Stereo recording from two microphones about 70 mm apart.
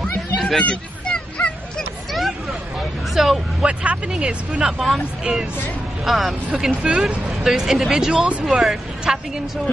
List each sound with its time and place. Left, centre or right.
0.4 s chatter: centre
0.7 s honk: centre
3.2 s speech: centre
3.6 s speech: centre
4.7 s speech: centre
5.2 s speech: centre